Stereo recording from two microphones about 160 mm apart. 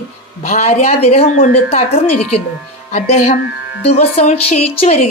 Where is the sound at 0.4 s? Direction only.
40° left (ahead or behind).